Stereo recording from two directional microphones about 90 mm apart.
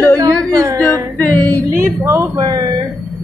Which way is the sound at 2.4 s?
50° right (ahead or behind).